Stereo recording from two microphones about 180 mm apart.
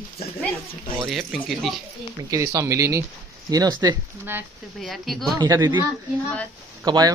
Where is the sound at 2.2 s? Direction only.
20° right (ahead or behind).